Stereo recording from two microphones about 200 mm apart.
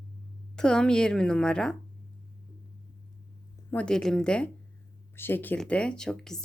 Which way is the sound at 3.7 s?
5° left (ahead or behind).